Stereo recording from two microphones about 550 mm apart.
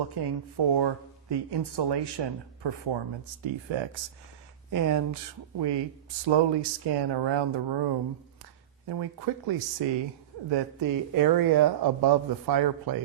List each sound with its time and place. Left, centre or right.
0.1 s speech: right
4.7 s speech: right
5.5 s speech: right